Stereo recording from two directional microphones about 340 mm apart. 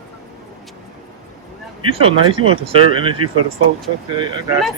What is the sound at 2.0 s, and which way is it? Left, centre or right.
Speech, centre.